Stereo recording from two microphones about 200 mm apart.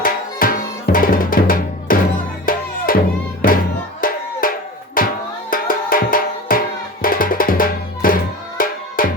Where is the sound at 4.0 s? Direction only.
45° left (ahead or behind).